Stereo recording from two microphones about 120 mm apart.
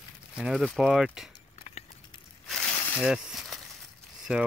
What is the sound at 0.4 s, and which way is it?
Speech, centre (ahead or behind).